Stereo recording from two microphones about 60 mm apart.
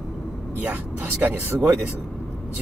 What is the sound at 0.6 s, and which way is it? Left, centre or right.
Speech, right.